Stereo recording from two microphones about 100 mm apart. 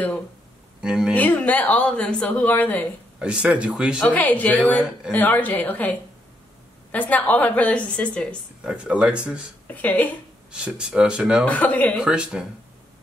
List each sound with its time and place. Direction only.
0.7 s speech: 5° right (ahead or behind)
1.1 s a woman's voice: 15° left (ahead or behind)
3.2 s speech: 10° right (ahead or behind)
4.0 s a woman's voice: 15° left (ahead or behind)
8.6 s speech: 10° right (ahead or behind)
9.7 s a woman's voice: 15° left (ahead or behind)
10.5 s speech: 10° right (ahead or behind)
11.4 s a woman's voice: 15° left (ahead or behind)
12.0 s speech: 10° right (ahead or behind)